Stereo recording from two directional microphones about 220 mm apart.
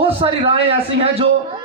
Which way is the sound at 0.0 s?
25° right (ahead or behind).